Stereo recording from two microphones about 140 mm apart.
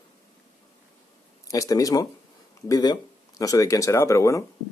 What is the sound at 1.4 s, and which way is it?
Speech, 25° left (ahead or behind).